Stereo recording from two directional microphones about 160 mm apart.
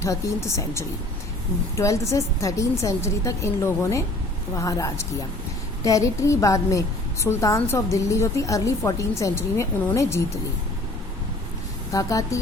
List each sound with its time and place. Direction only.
0.0 s a woman's voice: 15° left (ahead or behind)
11.9 s a woman's voice: 20° left (ahead or behind)